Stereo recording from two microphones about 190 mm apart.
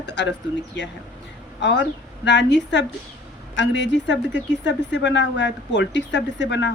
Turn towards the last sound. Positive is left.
turn(degrees=70)  # may be behind; listen again after turning